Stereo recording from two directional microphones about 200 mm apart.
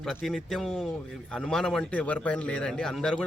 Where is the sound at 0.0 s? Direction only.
Centre (ahead or behind).